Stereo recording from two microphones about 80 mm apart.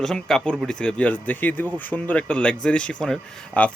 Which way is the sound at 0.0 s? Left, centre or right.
Centre.